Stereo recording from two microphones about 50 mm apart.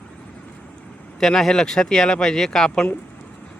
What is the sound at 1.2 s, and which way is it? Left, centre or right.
Speech, centre.